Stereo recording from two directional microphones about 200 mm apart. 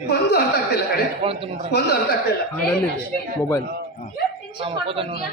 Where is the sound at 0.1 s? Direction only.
50° left (ahead or behind).